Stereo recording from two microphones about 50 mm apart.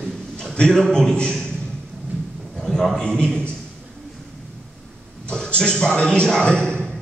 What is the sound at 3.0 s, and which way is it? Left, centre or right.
Speech, centre.